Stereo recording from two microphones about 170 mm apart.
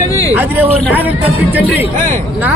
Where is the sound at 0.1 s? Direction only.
20° left (ahead or behind).